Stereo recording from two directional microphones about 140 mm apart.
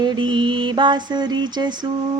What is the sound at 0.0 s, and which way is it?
Mantra, 30° right (ahead or behind).